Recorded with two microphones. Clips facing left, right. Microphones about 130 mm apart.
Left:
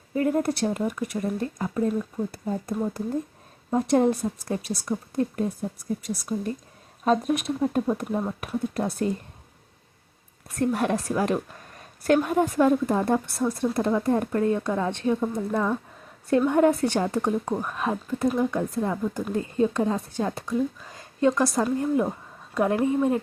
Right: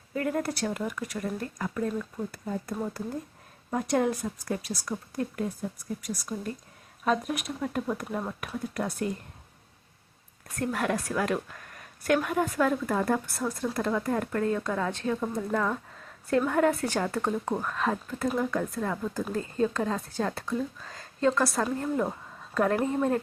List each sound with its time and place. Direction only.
0.1 s a woman's voice: 25° left (ahead or behind)
10.6 s a woman's voice: 25° left (ahead or behind)
15.2 s a woman's voice: 5° left (ahead or behind)